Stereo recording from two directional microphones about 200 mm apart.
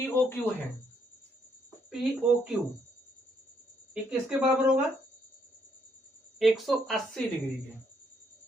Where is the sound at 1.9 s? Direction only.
Centre (ahead or behind).